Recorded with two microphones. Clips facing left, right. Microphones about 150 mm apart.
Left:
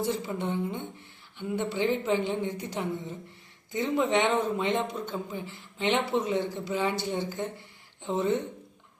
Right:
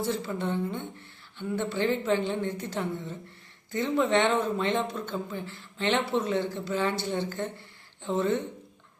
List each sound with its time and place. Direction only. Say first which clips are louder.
0.0 s speech: even; 15° left (ahead or behind)